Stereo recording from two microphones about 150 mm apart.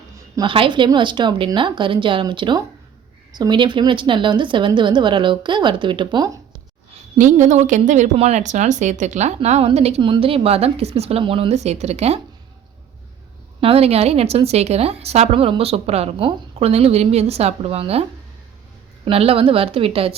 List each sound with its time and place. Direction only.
0.3 s a woman's voice: 35° right (ahead or behind)
7.2 s a woman's voice: 55° right (ahead or behind)
13.6 s a woman's voice: 40° right (ahead or behind)
19.0 s a woman's voice: 40° right (ahead or behind)